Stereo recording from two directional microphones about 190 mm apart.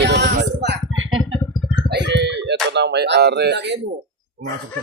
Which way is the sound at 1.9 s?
65° right (ahead or behind).